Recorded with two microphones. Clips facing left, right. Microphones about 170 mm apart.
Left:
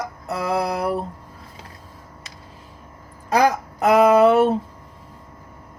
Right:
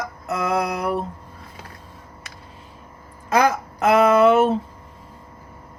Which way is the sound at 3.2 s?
40° left (ahead or behind).